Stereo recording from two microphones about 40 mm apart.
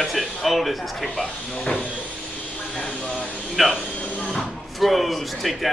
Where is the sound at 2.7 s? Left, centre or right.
Centre.